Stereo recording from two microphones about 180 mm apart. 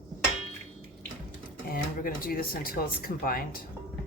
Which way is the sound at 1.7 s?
55° left (ahead or behind).